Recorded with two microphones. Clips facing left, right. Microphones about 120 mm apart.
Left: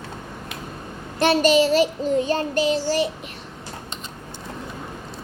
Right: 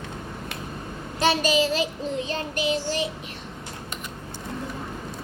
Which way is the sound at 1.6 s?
35° left (ahead or behind).